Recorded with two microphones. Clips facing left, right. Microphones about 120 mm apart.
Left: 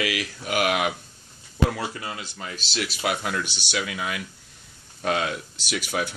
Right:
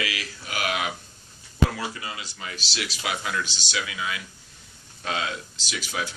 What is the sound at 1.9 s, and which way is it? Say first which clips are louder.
Speech: left 2 dB; 45° left (ahead or behind).